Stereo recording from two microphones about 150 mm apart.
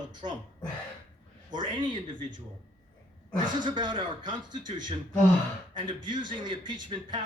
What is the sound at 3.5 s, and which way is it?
Speech, 30° right (ahead or behind).